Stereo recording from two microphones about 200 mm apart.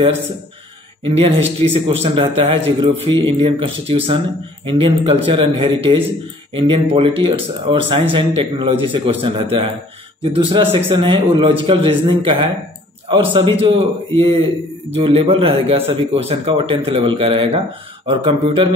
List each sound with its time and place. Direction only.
1.6 s speech: 30° right (ahead or behind)